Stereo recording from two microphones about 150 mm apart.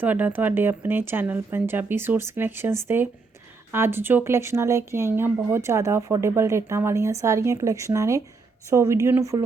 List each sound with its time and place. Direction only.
0.0 s speech: 10° right (ahead or behind)